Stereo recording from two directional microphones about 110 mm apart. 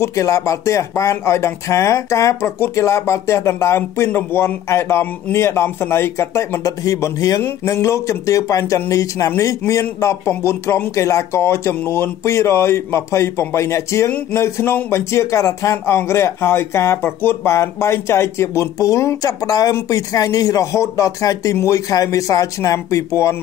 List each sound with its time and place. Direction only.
0.0 s speech: 30° left (ahead or behind)